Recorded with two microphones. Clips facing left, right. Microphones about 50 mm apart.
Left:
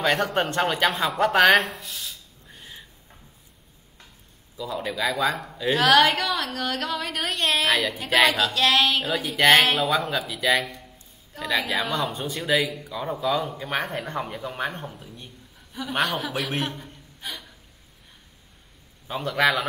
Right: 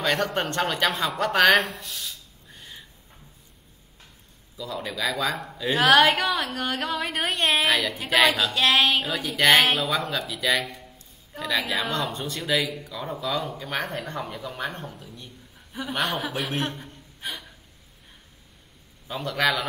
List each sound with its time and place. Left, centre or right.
0.0 s a woman's voice: centre
4.6 s speech: centre
5.8 s a sound: centre
7.6 s speech: centre
8.5 s a sound: centre
9.0 s a woman's voice: centre; by 14.9 s left
14.9 s a woman's voice: centre
15.7 s a sound: centre
16.1 s speech: centre
17.2 s hiccup: centre
19.0 s a woman's voice: centre